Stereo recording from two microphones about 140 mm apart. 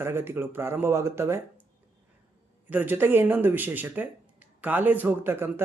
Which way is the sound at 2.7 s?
15° right (ahead or behind).